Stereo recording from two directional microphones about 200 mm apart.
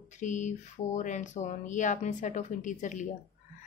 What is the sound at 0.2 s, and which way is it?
A woman's voice, 35° left (ahead or behind).